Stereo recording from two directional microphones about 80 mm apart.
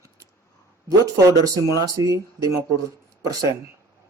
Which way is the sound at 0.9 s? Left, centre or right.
Right.